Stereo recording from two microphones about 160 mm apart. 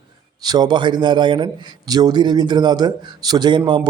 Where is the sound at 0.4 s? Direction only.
25° right (ahead or behind).